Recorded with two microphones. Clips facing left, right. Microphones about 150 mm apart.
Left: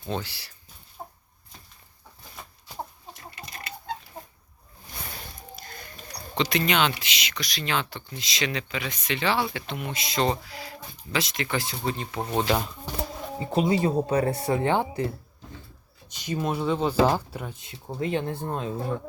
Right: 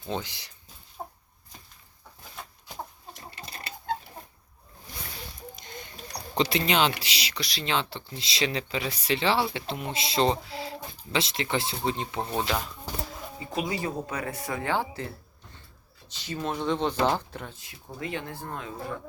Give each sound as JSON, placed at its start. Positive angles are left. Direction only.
{"t": 0.1, "sound": "speech", "side_deg": -20}
{"t": 5.5, "sound": "a sound", "side_deg": -20}
{"t": 6.4, "sound": "speech", "side_deg": -30}
{"t": 13.4, "sound": "speech", "side_deg": 30}
{"t": 16.0, "sound": "speech", "side_deg": 15}
{"t": 17.6, "sound": "speech", "side_deg": 25}